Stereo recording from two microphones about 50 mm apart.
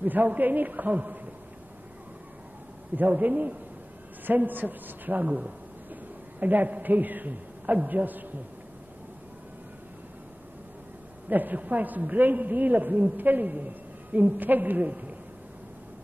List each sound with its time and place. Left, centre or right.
0.0 s a man's voice: right
3.0 s a man's voice: right
11.2 s a man's voice: right